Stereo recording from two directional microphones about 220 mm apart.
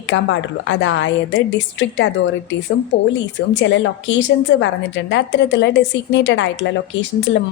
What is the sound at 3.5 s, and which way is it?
A woman's voice, 55° left (ahead or behind).